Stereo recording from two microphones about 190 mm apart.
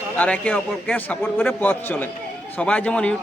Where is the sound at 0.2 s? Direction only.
5° left (ahead or behind).